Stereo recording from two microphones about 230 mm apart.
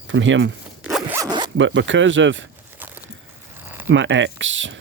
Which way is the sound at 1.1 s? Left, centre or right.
Centre.